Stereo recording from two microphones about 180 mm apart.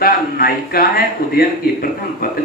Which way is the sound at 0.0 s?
55° left (ahead or behind).